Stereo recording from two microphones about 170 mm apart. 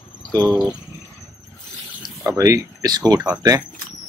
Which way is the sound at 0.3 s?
20° right (ahead or behind).